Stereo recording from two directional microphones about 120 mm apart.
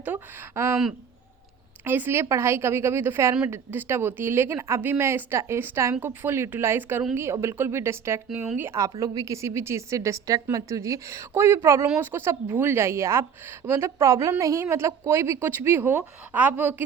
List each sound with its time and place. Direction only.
0.0 s a woman's voice: 15° right (ahead or behind)
1.8 s a woman's voice: 15° right (ahead or behind)